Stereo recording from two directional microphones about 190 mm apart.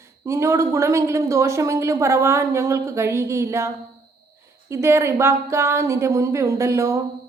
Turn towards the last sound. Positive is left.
turn(degrees=-15)  # may be behind; listen again after turning